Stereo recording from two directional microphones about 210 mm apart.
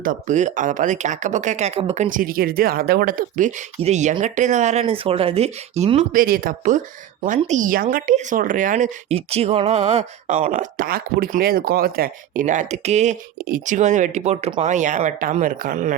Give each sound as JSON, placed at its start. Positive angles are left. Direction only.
{"t": 0.0, "sound": "speech", "side_deg": -40}